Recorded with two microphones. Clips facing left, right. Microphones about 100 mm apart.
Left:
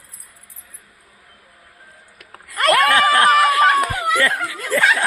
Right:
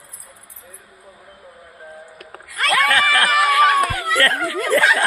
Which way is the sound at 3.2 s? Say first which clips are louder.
Left 2 dB; 40° left (ahead or behind).